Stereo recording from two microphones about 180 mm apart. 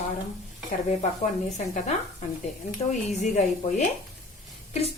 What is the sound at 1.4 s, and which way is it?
Speech, 40° left (ahead or behind).